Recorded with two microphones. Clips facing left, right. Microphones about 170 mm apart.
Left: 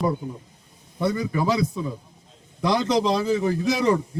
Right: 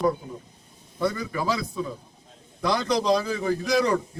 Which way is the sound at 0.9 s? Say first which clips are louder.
Left 3 dB; 20° left (ahead or behind).